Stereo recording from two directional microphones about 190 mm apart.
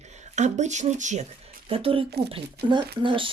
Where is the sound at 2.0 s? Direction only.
60° right (ahead or behind).